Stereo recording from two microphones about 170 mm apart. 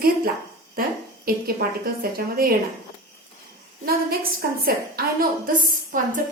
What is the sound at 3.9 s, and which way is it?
A woman's voice, 60° right (ahead or behind).